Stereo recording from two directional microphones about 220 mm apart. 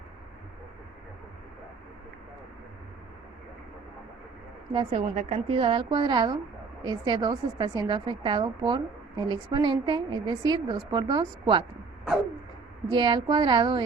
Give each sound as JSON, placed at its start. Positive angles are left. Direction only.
{"t": 4.9, "sound": "a woman's voice", "side_deg": -30}
{"t": 12.9, "sound": "a woman's voice", "side_deg": -20}